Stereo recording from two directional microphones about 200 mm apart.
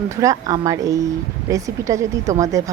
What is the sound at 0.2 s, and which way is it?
Speech, 15° right (ahead or behind).